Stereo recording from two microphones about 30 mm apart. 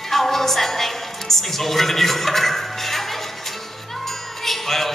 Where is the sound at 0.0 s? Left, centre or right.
Centre.